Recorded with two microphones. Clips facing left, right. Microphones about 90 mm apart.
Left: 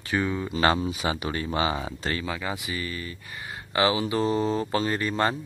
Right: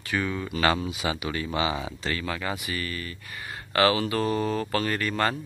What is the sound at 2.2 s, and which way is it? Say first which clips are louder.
Speech: even; 15° left (ahead or behind).